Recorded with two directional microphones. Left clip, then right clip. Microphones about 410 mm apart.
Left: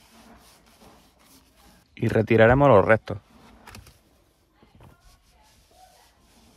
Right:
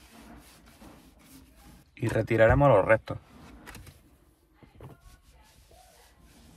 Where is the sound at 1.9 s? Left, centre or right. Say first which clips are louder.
Left 5 dB; centre.